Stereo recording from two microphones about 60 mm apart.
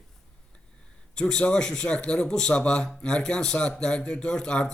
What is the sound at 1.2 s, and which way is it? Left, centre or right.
Speech, centre.